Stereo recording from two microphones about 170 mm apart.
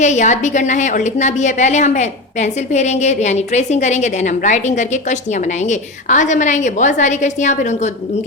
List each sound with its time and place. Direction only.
0.0 s a woman's voice: 45° left (ahead or behind)